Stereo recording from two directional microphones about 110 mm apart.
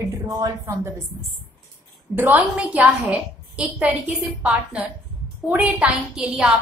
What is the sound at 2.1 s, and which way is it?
A woman's voice, 15° right (ahead or behind).